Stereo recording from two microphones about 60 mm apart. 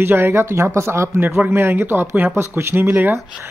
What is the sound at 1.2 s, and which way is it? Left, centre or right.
Speech, right.